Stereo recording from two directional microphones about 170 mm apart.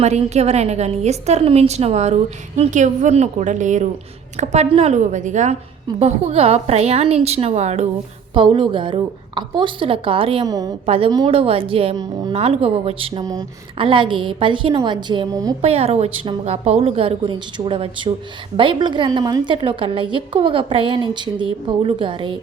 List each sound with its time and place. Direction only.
0.0 s a woman's voice: 40° right (ahead or behind)
8.3 s a woman's voice: 30° right (ahead or behind)
10.4 s a woman's voice: 20° right (ahead or behind)
10.8 s a woman's voice: 35° right (ahead or behind)
15.6 s a woman's voice: 35° right (ahead or behind)